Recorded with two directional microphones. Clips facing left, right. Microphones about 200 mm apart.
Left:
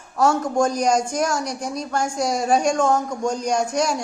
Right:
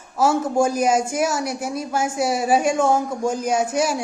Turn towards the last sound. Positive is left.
turn(degrees=-5)  # may be behind; listen again after turning